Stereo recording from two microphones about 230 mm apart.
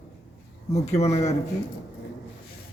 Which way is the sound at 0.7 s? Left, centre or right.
Left.